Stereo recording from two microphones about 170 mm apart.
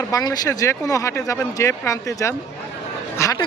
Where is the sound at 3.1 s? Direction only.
15° left (ahead or behind).